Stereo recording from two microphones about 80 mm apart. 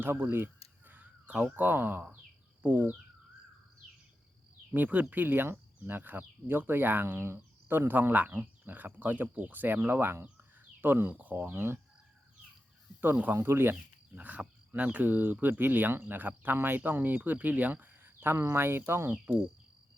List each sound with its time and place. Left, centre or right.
0.0 s caw: right
1.5 s speech: right
4.7 s speech: centre
10.2 s a sound: centre
11.5 s speech: right
13.3 s speech: right